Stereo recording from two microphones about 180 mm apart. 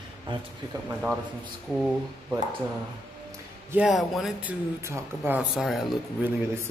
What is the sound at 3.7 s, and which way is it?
A man's voice, 5° right (ahead or behind).